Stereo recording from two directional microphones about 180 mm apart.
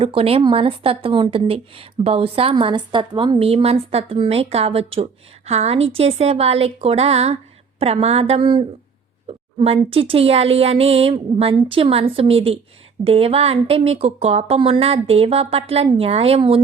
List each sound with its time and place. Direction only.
0.0 s speech: 30° right (ahead or behind)